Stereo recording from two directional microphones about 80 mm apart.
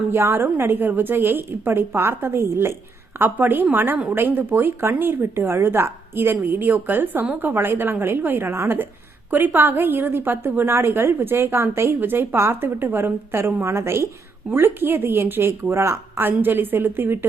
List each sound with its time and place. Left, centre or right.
0.1 s speech: right